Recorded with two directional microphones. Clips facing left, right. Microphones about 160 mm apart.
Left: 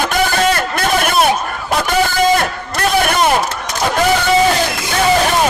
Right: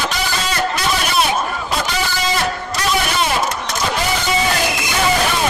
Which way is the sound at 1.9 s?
50° left (ahead or behind).